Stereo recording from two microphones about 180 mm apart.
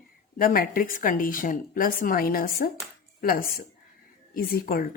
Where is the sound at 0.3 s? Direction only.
50° left (ahead or behind).